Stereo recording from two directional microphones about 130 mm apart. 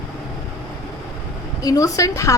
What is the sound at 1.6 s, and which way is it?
Speech, 25° left (ahead or behind).